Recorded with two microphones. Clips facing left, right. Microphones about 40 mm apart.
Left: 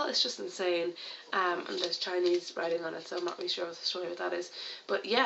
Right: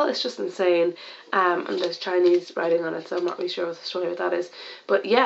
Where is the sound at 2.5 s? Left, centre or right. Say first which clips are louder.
Right 10 dB; right.